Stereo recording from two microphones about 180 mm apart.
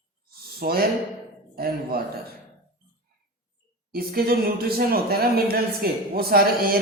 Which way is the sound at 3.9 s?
55° right (ahead or behind).